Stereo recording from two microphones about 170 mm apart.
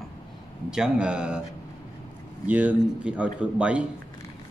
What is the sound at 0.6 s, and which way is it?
Speech, 5° right (ahead or behind).